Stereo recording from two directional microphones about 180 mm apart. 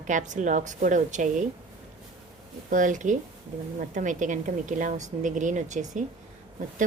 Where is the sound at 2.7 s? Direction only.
45° right (ahead or behind).